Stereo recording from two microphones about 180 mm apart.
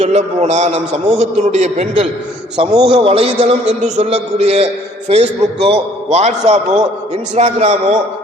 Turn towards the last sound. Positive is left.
turn(degrees=-40)  # may be behind; listen again after turning